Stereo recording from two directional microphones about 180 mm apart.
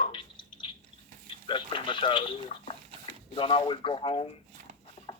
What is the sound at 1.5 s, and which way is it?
Speech, 25° left (ahead or behind).